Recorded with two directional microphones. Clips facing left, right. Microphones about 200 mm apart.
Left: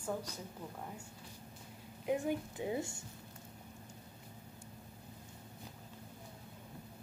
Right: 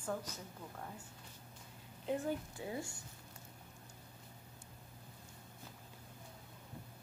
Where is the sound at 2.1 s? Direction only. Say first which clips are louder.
Left 3 dB; 15° left (ahead or behind).